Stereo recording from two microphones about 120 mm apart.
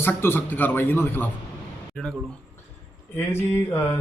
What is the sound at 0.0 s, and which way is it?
A man's voice, 20° left (ahead or behind).